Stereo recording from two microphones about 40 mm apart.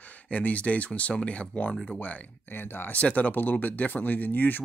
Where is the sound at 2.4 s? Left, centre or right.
Left.